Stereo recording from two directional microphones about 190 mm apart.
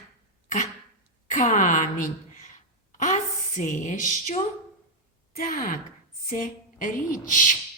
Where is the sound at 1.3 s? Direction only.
40° left (ahead or behind).